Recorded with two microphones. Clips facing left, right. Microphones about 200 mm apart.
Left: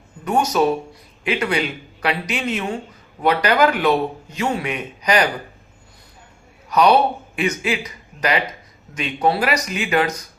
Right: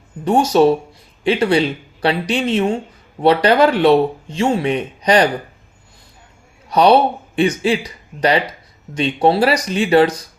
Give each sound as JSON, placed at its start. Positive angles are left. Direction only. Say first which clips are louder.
{"t": 0.3, "sound": "speech", "louder": "right 5 dB", "side_deg": -30}
{"t": 6.7, "sound": "speech", "louder": "right 3 dB", "side_deg": -30}
{"t": 9.0, "sound": "speech", "louder": "right 5 dB", "side_deg": -30}